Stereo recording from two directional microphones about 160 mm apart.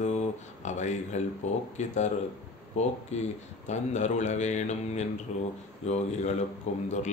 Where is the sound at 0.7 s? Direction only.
45° left (ahead or behind).